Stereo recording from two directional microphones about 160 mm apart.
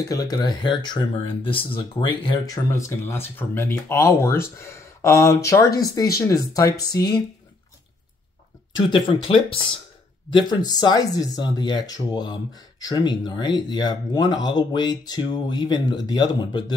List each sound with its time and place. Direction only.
0.0 s speech: 25° left (ahead or behind)
9.1 s speech: 35° left (ahead or behind)